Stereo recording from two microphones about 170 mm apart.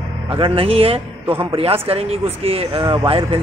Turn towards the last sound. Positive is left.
turn(degrees=-30)  # may be behind; listen again after turning